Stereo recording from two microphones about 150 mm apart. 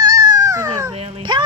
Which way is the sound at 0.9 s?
35° right (ahead or behind).